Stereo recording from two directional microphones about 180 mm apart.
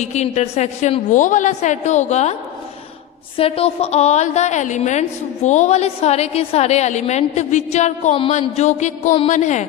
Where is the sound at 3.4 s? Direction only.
35° left (ahead or behind).